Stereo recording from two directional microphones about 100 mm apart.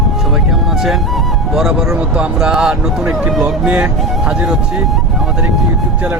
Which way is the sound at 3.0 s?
15° right (ahead or behind).